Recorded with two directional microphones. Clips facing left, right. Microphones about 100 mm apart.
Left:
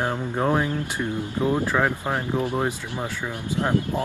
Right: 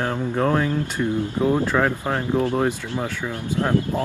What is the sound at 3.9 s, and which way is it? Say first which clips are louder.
Speech: right 2 dB; 20° right (ahead or behind).